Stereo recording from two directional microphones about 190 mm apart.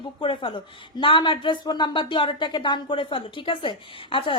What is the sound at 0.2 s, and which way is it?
Speech, 25° left (ahead or behind).